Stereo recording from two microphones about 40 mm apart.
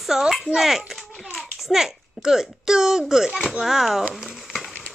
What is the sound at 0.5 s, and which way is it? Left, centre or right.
A child's voice, centre.